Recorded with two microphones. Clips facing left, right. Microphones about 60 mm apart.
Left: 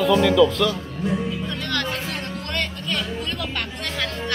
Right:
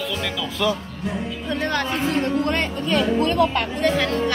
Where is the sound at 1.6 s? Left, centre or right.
Right.